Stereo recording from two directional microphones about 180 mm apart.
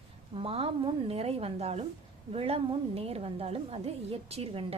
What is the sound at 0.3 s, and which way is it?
A woman's voice, 30° right (ahead or behind).